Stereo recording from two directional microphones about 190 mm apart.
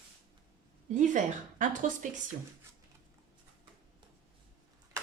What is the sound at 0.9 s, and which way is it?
Speech, 40° right (ahead or behind).